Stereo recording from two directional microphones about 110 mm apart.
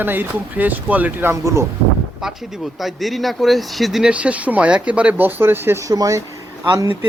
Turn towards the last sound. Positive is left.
turn(degrees=-35)  # may be behind; listen again after turning